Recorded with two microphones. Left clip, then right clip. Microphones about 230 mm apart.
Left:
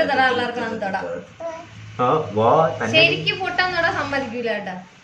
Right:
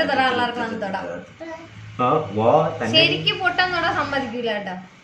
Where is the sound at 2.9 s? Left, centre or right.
Centre.